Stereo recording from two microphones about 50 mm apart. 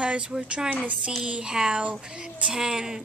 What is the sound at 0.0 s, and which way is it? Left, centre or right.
A woman's voice, right.